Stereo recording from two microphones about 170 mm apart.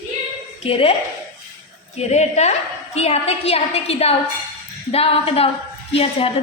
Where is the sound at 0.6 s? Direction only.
35° left (ahead or behind).